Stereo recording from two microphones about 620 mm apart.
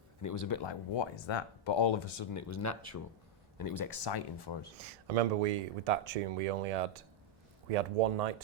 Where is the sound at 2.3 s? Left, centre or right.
Left.